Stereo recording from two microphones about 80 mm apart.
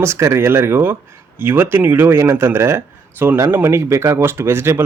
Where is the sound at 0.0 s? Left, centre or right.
Right.